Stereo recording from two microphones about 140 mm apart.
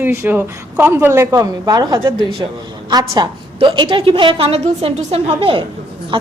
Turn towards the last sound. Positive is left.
turn(degrees=-40)  # may be behind; listen again after turning